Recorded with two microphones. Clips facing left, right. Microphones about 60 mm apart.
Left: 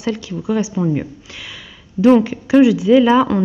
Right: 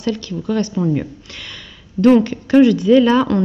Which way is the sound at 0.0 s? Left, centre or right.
Centre.